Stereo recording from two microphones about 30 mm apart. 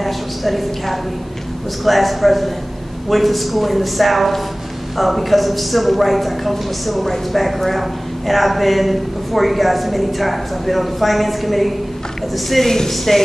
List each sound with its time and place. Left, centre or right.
0.0 s a sound: centre
1.9 s a woman's voice: centre
12.6 s speech: centre